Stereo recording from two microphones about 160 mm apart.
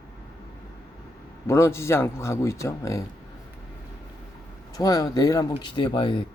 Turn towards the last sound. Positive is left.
turn(degrees=30)  # may be behind; listen again after turning